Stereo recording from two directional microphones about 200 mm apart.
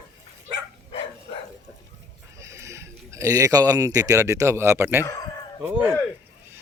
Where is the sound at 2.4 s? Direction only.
15° right (ahead or behind).